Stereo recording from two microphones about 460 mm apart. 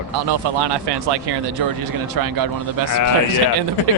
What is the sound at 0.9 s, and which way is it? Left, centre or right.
Speech, right.